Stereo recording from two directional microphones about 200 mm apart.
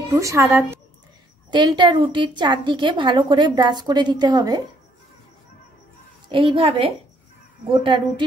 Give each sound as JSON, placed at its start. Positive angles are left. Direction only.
{"t": 0.1, "sound": "a woman's voice", "side_deg": -15}
{"t": 6.2, "sound": "a woman's voice", "side_deg": -25}